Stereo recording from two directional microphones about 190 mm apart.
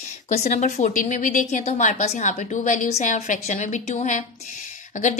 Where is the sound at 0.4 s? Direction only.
40° left (ahead or behind).